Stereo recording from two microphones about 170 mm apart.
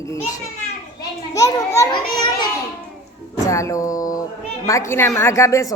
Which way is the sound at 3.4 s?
20° left (ahead or behind).